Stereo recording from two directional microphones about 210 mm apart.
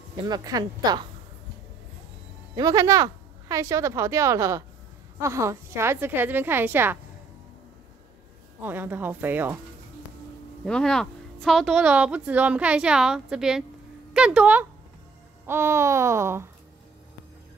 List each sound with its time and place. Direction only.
0.2 s speech: 20° right (ahead or behind)
2.5 s a woman's voice: 15° right (ahead or behind)
8.5 s a woman's voice: 10° right (ahead or behind)
10.6 s a woman's voice: 5° left (ahead or behind)